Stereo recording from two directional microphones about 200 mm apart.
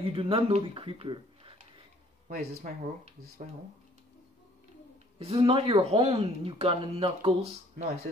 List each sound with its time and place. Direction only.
0.1 s speech: 25° right (ahead or behind)
2.2 s speech: 40° right (ahead or behind)
5.2 s speech: 30° right (ahead or behind)